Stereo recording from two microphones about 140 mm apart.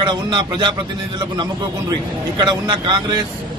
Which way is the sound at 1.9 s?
30° right (ahead or behind).